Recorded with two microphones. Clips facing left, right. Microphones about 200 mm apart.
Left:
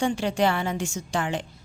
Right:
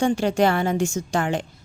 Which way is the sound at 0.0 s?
45° right (ahead or behind).